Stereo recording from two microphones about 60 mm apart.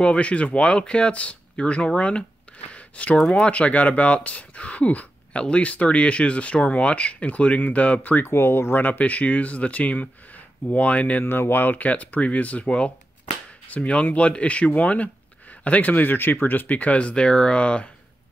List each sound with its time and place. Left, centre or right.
0.0 s speech: centre
2.7 s a sound: left
3.2 s speech: centre
8.3 s speech: left
8.8 s speech: left
11.2 s speech: left; by 17.8 s centre